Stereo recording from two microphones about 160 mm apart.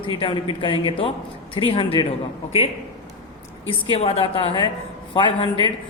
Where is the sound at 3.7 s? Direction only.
35° left (ahead or behind).